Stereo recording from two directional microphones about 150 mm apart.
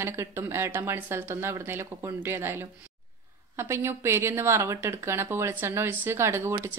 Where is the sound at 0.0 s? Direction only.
20° right (ahead or behind).